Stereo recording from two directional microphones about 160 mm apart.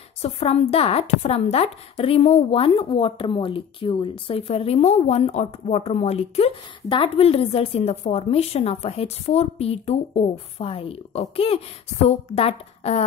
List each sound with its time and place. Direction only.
0.2 s a woman's voice: 40° left (ahead or behind)